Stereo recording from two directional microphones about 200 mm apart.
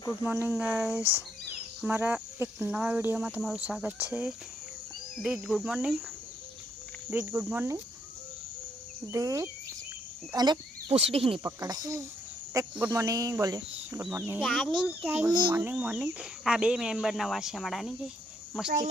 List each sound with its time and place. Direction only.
0.2 s speech: 10° right (ahead or behind)
7.1 s speech: 10° right (ahead or behind)
9.1 s speech: 15° right (ahead or behind)
11.4 s speech: 15° right (ahead or behind); by 18.1 s centre (ahead or behind)